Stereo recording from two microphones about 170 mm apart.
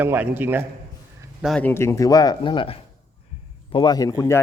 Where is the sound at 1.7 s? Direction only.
15° left (ahead or behind).